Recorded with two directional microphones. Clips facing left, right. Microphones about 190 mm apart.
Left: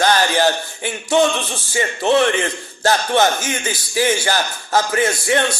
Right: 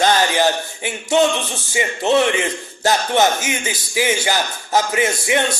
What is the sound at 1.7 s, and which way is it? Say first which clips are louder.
A man's voice: even; 15° right (ahead or behind).